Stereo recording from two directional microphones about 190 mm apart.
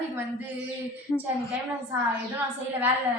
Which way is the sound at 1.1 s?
25° left (ahead or behind).